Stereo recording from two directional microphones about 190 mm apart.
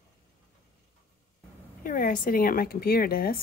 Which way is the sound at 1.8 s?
45° left (ahead or behind).